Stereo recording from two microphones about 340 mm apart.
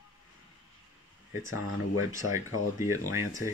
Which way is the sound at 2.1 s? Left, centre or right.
Centre.